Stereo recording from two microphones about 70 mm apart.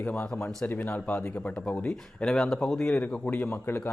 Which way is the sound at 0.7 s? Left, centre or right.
Left.